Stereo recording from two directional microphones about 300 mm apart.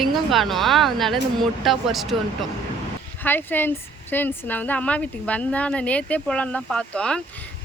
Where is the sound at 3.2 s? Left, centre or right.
Centre.